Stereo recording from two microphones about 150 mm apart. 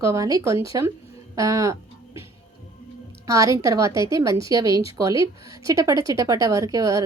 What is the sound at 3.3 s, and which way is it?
Speech, 20° right (ahead or behind).